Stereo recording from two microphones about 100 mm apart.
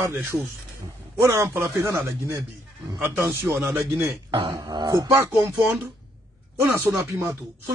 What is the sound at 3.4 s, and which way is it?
Speech, 25° right (ahead or behind).